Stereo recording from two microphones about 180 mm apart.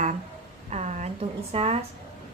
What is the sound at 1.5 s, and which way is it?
Speech, 35° right (ahead or behind).